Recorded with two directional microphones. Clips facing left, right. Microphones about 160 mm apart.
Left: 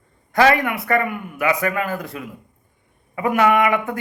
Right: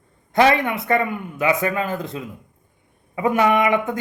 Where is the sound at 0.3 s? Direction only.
20° right (ahead or behind).